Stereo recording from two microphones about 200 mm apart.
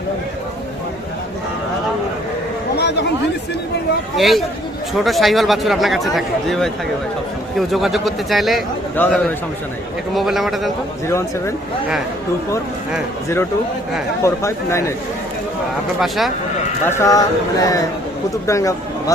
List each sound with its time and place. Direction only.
2.7 s chatter: 60° left (ahead or behind)
4.2 s a man's voice: centre (ahead or behind)
14.2 s speech: 15° left (ahead or behind)
16.0 s a man's voice: centre (ahead or behind)
16.8 s speech: 15° left (ahead or behind)